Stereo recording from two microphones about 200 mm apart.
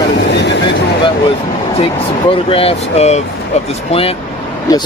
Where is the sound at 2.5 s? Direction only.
30° left (ahead or behind).